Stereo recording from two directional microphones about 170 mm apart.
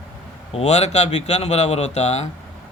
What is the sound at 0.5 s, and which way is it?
A man's voice, 40° left (ahead or behind).